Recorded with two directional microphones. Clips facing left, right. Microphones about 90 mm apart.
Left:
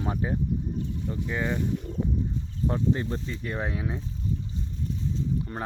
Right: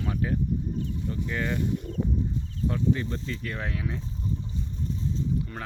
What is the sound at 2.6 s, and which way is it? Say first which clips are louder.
Speech: left 1 dB; 30° left (ahead or behind).